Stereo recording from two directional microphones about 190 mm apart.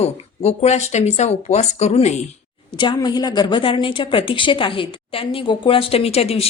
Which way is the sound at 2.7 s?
25° left (ahead or behind).